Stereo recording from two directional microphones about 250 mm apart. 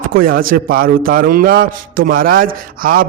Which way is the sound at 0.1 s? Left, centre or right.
Right.